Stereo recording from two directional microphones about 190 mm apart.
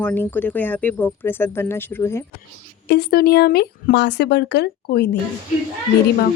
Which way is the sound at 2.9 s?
55° left (ahead or behind).